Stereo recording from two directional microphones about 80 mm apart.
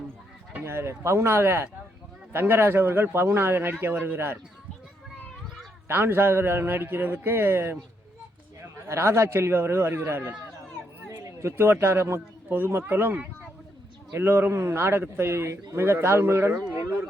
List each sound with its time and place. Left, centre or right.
0.6 s a man's voice: right
5.9 s a man's voice: right
11.2 s a man's voice: right